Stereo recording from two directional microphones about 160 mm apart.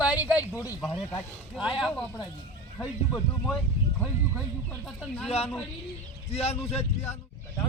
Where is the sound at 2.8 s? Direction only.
10° left (ahead or behind).